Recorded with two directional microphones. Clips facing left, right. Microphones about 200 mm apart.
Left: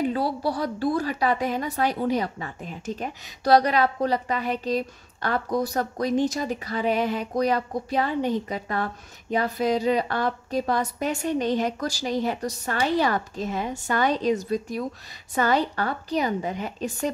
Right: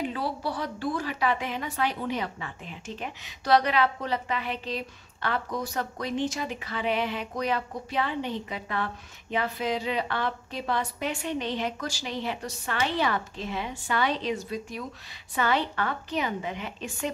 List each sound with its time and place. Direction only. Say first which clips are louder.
0.1 s a woman's voice: left 5 dB; 40° left (ahead or behind)